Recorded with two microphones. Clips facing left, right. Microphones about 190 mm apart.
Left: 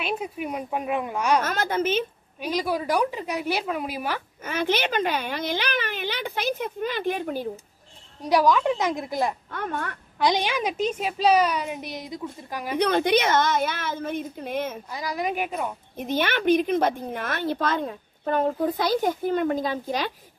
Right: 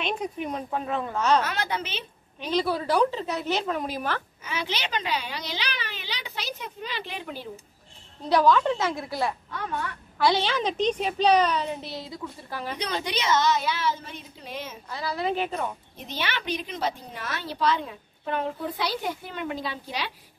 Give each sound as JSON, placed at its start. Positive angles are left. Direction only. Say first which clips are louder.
{"t": 0.0, "sound": "a child's voice", "louder": "left 1 dB", "side_deg": 5}
{"t": 1.4, "sound": "a woman's voice", "louder": "left 5 dB", "side_deg": 45}
{"t": 2.4, "sound": "a child's voice", "louder": "even", "side_deg": 10}
{"t": 4.5, "sound": "a woman's voice", "louder": "left 7 dB", "side_deg": 50}
{"t": 8.2, "sound": "a child's voice", "louder": "even", "side_deg": 15}
{"t": 9.5, "sound": "a woman's voice", "louder": "left 2 dB", "side_deg": 50}
{"t": 10.1, "sound": "a child's voice", "louder": "even", "side_deg": 15}
{"t": 12.7, "sound": "a woman's voice", "louder": "left 12 dB", "side_deg": 55}
{"t": 14.9, "sound": "a child's voice", "louder": "even", "side_deg": 15}
{"t": 16.0, "sound": "a woman's voice", "louder": "left 8 dB", "side_deg": 50}